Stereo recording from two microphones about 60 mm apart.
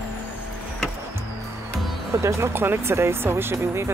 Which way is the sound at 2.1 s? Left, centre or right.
Right.